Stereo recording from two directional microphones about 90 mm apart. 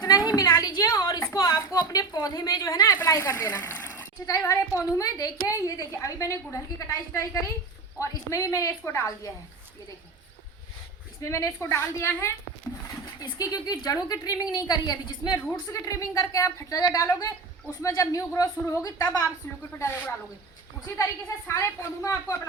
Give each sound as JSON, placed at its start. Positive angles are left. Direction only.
{"t": 0.0, "sound": "a sound", "side_deg": 45}
{"t": 1.3, "sound": "a woman's voice", "side_deg": 40}
{"t": 3.6, "sound": "a sound", "side_deg": 25}
{"t": 4.3, "sound": "a woman's voice", "side_deg": 35}
{"t": 11.2, "sound": "a woman's voice", "side_deg": 40}
{"t": 13.1, "sound": "a woman's voice", "side_deg": 45}
{"t": 20.8, "sound": "a woman's voice", "side_deg": 35}